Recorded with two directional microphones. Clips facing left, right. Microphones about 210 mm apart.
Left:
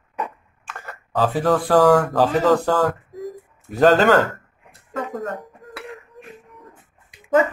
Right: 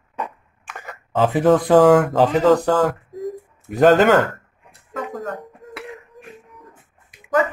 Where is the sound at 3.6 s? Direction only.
15° right (ahead or behind).